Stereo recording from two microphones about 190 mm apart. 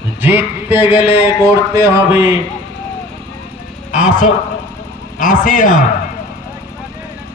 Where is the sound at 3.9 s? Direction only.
40° left (ahead or behind).